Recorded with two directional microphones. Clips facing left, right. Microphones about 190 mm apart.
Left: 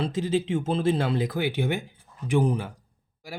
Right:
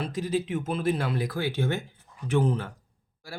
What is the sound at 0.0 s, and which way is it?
Speech, 25° left (ahead or behind).